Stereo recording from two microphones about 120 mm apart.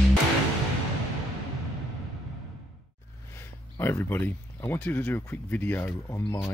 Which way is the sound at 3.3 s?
20° left (ahead or behind).